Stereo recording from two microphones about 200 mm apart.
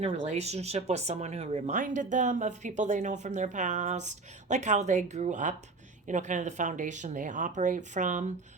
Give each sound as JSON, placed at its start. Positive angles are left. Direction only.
{"t": 0.0, "sound": "speech", "side_deg": -35}